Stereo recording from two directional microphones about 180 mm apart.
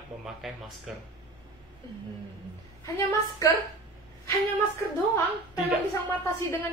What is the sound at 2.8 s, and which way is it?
Speech, 15° left (ahead or behind).